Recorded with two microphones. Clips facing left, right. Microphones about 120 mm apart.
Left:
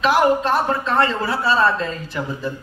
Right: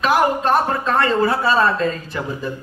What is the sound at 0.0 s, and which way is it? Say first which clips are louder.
A woman's voice: left 1 dB; 45° right (ahead or behind).